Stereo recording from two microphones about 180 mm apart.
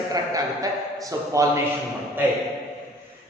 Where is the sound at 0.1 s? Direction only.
20° right (ahead or behind).